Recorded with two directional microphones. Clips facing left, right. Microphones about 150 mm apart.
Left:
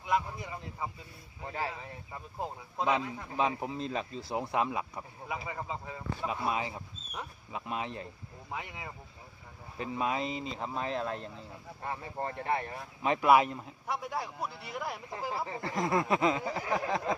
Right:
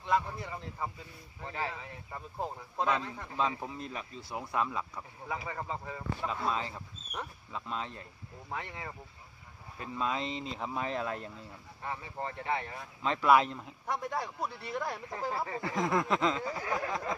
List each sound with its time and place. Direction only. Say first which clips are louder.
0.0 s a sound: right 1 dB; 10° left (ahead or behind)
1.7 s speech: even; 10° left (ahead or behind)
3.6 s speech: left 5 dB; 25° left (ahead or behind)
7.1 s speech: even; 5° left (ahead or behind)
7.6 s speech: left 3 dB; 15° left (ahead or behind); by 11.4 s 5° right (ahead or behind)
12.2 s speech: left 2 dB; 45° left (ahead or behind)
13.0 s speech: left 1 dB; 10° left (ahead or behind)